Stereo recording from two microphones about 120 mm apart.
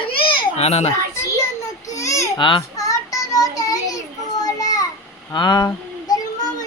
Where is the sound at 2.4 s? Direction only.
40° left (ahead or behind).